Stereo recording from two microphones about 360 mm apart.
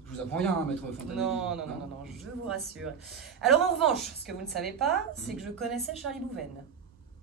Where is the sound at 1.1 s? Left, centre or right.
Centre.